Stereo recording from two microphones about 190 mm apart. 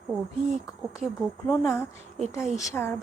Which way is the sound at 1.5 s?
15° left (ahead or behind).